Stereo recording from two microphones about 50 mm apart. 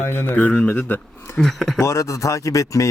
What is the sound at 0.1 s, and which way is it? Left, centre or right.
Speech, left.